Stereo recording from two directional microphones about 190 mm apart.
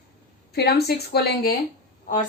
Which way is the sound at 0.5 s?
60° left (ahead or behind).